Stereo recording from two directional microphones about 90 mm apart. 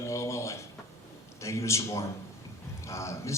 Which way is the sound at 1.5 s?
35° left (ahead or behind).